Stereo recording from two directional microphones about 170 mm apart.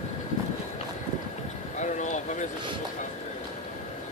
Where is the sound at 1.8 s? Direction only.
45° left (ahead or behind).